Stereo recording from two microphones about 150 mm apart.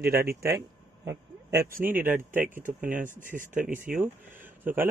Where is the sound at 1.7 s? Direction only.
65° right (ahead or behind).